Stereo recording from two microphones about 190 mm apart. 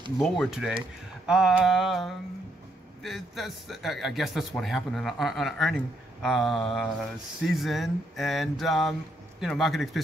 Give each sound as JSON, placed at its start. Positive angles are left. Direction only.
{"t": 0.2, "sound": "speech", "side_deg": 0}